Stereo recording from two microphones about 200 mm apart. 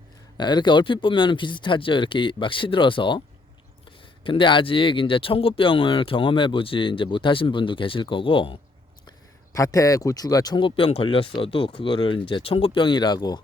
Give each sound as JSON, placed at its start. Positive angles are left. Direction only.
{"t": 0.3, "sound": "speech", "side_deg": 20}
{"t": 9.0, "sound": "speech", "side_deg": 15}